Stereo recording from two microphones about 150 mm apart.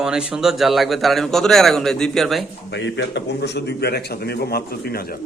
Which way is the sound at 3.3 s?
90° left.